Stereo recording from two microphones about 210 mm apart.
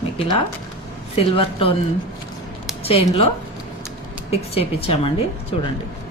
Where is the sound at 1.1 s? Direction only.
25° left (ahead or behind).